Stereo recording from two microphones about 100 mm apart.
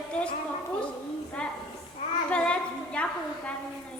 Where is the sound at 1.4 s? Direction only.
10° left (ahead or behind).